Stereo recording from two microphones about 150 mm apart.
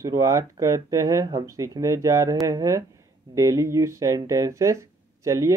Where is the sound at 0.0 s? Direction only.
20° right (ahead or behind).